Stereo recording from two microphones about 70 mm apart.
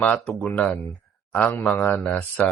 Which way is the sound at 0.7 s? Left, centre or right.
Centre.